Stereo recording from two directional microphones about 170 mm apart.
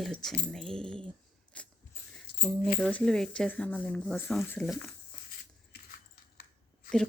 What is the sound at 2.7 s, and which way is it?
Speech, 5° left (ahead or behind).